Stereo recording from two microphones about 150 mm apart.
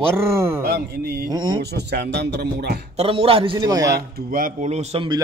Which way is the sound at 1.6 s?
90° right.